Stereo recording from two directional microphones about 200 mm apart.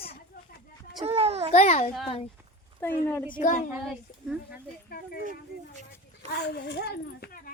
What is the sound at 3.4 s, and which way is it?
Speech, 40° left (ahead or behind).